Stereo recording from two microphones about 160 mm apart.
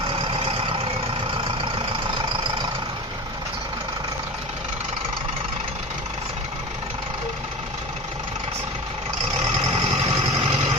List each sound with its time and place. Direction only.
0.1 s vehicle: 35° right (ahead or behind)
9.4 s vehicle: 40° right (ahead or behind)